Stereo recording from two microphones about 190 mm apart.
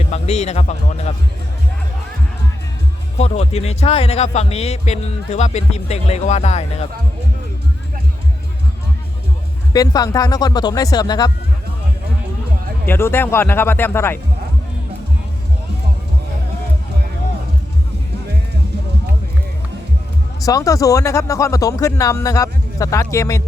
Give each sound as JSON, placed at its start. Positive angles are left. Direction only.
{"t": 0.1, "sound": "a man's voice", "side_deg": 35}
{"t": 3.2, "sound": "speech", "side_deg": 35}
{"t": 9.7, "sound": "speech", "side_deg": 20}
{"t": 12.8, "sound": "speech", "side_deg": 10}
{"t": 20.4, "sound": "speech", "side_deg": 20}